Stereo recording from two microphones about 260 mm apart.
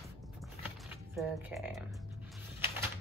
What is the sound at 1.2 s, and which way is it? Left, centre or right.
Speech, centre.